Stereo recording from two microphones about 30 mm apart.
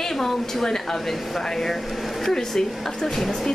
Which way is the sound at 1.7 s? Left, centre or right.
Centre.